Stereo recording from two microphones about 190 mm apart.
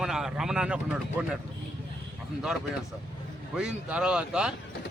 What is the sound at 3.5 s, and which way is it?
Speech, 5° right (ahead or behind).